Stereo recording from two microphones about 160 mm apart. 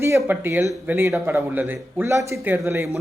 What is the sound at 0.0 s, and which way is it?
Speech, 15° right (ahead or behind).